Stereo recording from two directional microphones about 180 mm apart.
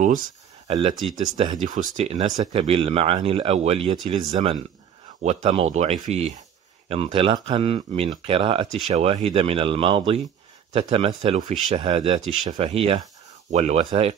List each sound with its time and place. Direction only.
0.7 s speech: 35° right (ahead or behind)
1.1 s speech: 20° right (ahead or behind)
1.6 s speech: 45° right (ahead or behind)
2.2 s speech: 25° right (ahead or behind)
2.6 s speech: 35° right (ahead or behind)
5.2 s speech: 40° right (ahead or behind)
11.8 s speech: 30° right (ahead or behind)